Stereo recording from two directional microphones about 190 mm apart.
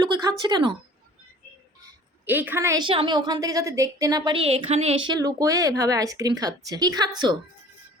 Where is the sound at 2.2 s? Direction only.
10° right (ahead or behind).